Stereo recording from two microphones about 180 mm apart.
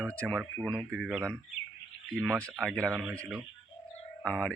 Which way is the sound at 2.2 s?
5° left (ahead or behind).